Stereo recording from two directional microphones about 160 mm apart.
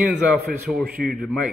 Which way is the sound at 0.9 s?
65° right (ahead or behind).